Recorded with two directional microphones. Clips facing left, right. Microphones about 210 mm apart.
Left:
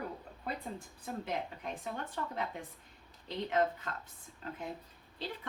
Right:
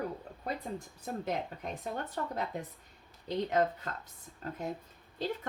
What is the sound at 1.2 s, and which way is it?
Speech, 40° right (ahead or behind).